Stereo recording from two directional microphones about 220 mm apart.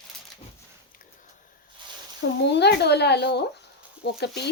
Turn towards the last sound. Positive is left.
turn(degrees=45)  # may be behind; listen again after turning